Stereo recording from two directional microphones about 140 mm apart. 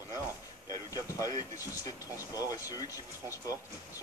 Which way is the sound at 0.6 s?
25° left (ahead or behind).